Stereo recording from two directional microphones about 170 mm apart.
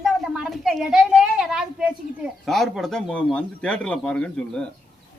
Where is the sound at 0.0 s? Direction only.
Centre (ahead or behind).